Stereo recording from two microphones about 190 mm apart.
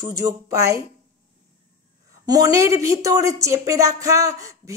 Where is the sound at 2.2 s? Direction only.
20° right (ahead or behind).